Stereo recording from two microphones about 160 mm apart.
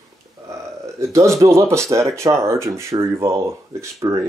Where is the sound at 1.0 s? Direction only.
20° right (ahead or behind).